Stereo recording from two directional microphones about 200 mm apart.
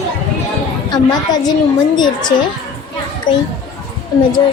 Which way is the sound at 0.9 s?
20° left (ahead or behind).